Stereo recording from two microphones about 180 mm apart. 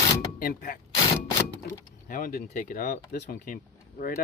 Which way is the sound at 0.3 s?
55° left (ahead or behind).